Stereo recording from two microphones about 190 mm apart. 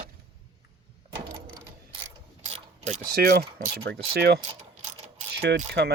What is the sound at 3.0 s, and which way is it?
Speech, 50° right (ahead or behind).